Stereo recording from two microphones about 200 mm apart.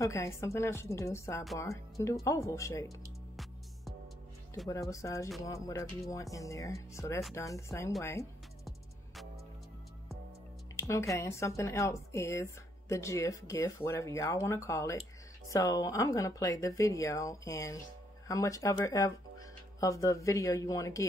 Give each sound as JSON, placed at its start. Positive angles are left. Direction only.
{"t": 0.0, "sound": "speech", "side_deg": 15}
{"t": 4.6, "sound": "speech", "side_deg": 15}
{"t": 8.6, "sound": "music", "side_deg": 0}
{"t": 10.8, "sound": "speech", "side_deg": 15}